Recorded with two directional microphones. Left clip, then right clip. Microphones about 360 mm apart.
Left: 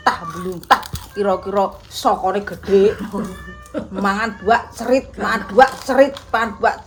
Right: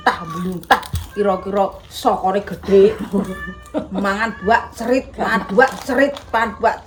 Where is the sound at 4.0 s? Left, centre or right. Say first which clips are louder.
Left 1 dB; centre.